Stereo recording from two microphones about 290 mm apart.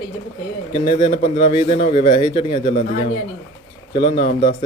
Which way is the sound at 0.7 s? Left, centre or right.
Centre.